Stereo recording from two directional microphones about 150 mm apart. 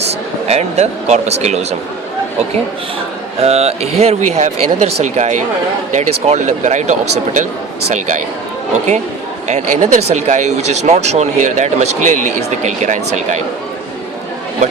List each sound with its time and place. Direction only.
0.0 s speech: 45° right (ahead or behind)
3.4 s speech: 45° right (ahead or behind)
9.5 s speech: 55° right (ahead or behind)